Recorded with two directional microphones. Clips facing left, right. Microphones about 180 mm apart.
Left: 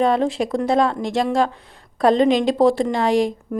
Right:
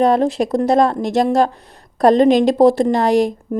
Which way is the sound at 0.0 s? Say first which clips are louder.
Right 4 dB; 40° right (ahead or behind).